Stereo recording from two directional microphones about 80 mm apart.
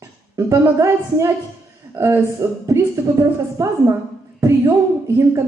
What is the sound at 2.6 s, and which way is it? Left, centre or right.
A woman's voice, right.